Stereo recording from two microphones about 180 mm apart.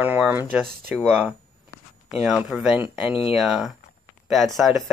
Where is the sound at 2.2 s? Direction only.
5° right (ahead or behind).